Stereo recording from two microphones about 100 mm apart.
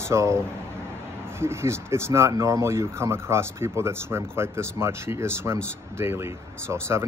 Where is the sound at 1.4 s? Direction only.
25° right (ahead or behind).